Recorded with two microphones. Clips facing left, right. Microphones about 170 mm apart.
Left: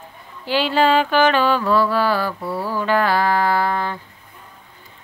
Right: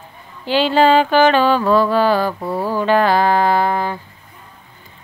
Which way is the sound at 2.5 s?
45° right (ahead or behind).